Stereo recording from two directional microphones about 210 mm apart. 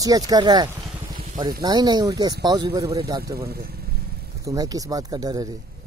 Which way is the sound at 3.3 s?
45° right (ahead or behind).